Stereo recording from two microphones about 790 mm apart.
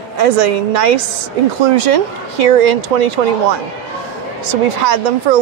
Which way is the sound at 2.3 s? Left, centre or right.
Right.